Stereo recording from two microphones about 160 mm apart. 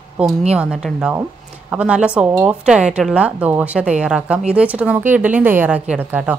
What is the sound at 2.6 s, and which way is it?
Speech, 5° right (ahead or behind).